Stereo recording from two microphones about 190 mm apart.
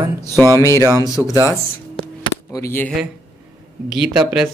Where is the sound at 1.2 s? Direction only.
5° right (ahead or behind).